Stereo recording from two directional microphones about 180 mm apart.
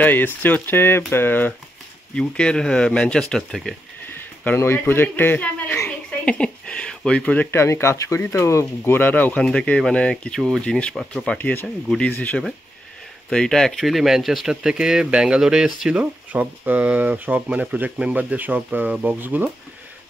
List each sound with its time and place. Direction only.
0.0 s speech: 10° left (ahead or behind); by 19.5 s 10° right (ahead or behind)